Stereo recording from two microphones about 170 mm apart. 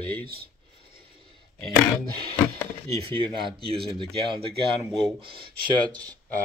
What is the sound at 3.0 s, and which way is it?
Speech, 30° right (ahead or behind).